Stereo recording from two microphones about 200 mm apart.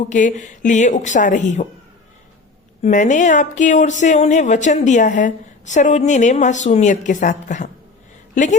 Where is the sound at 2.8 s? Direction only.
40° left (ahead or behind).